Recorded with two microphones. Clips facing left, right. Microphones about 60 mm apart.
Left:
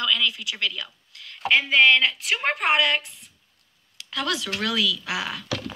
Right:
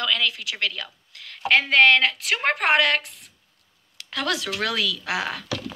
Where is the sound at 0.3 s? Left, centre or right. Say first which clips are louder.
Right 1 dB; right.